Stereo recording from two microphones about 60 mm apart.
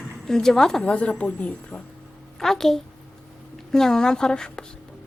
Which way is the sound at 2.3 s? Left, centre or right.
Centre.